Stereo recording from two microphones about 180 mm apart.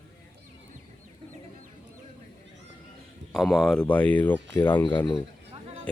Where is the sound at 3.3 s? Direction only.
Centre (ahead or behind).